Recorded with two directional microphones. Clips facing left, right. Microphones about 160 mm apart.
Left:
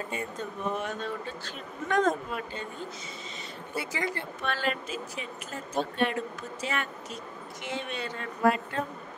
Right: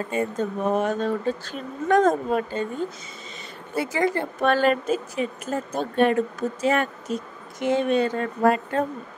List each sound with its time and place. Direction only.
0.1 s speech: 45° right (ahead or behind)
3.7 s speech: 50° right (ahead or behind)